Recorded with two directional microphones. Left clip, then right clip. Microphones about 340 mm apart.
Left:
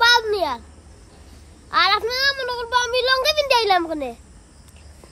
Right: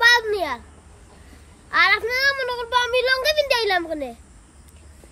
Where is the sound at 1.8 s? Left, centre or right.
Centre.